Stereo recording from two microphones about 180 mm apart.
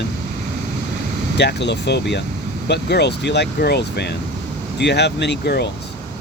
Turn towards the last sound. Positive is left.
turn(degrees=70)  # may be behind; listen again after turning